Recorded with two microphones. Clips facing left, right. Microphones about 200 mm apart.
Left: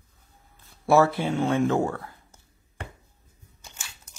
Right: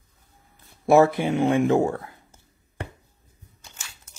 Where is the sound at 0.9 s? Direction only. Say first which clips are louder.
Right 3 dB; 15° right (ahead or behind).